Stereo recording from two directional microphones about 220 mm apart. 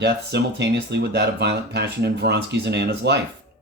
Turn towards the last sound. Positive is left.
turn(degrees=-50)  # may be behind; listen again after turning